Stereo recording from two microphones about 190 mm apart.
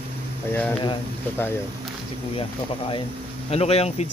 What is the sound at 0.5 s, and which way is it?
Speech, 10° left (ahead or behind).